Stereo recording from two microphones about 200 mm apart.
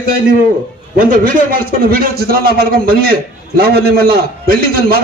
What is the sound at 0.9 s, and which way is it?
A man's voice, 45° right (ahead or behind).